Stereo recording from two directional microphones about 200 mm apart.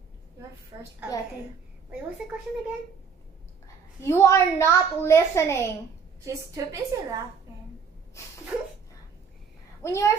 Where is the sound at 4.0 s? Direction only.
15° left (ahead or behind).